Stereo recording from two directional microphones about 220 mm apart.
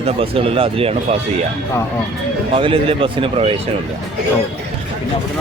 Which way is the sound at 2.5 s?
25° right (ahead or behind).